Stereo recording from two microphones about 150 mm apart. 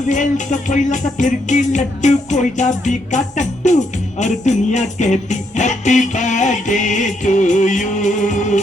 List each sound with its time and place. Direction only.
0.1 s music: 55° left (ahead or behind)